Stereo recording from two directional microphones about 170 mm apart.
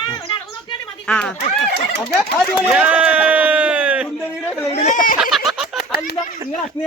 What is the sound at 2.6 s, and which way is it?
Speech, 10° right (ahead or behind).